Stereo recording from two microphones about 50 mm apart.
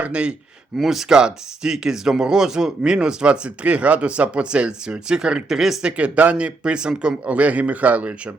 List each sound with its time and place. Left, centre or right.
0.0 s speech: right
0.8 s speech: centre
5.8 s speech: right
7.3 s speech: right